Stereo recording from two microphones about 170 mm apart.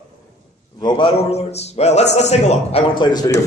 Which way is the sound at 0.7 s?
30° left (ahead or behind).